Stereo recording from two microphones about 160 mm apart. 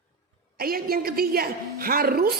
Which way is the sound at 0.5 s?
70° right (ahead or behind).